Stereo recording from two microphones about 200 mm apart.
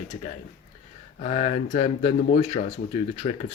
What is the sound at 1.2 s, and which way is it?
Speech, 30° left (ahead or behind).